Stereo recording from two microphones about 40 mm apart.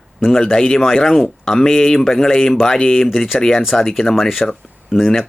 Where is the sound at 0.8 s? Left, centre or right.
Centre.